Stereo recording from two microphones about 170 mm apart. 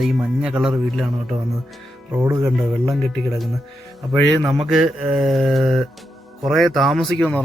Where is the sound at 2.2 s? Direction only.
15° right (ahead or behind).